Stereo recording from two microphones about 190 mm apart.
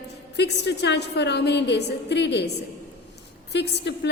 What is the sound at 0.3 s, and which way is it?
A woman's voice, 60° left (ahead or behind).